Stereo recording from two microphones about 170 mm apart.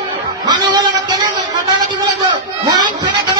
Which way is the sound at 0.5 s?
25° right (ahead or behind).